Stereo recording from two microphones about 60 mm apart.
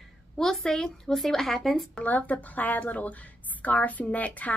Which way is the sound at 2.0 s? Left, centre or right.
Left.